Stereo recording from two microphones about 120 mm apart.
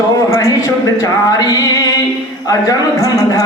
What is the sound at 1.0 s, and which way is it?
A man's voice, 30° left (ahead or behind).